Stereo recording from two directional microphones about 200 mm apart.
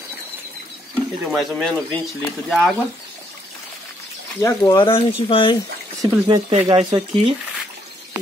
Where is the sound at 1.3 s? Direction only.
Centre (ahead or behind).